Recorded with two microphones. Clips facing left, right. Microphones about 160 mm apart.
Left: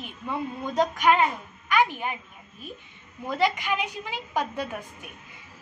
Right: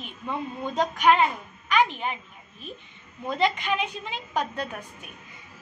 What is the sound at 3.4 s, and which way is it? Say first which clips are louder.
A woman's voice: even; 10° left (ahead or behind).